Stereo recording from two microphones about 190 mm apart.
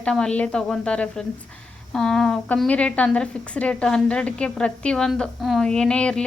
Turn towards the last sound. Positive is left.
turn(degrees=5)  # may be behind; listen again after turning